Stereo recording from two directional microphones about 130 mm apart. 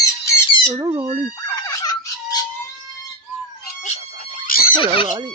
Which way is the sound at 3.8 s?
70° left (ahead or behind).